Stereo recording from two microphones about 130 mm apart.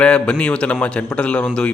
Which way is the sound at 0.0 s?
10° left (ahead or behind).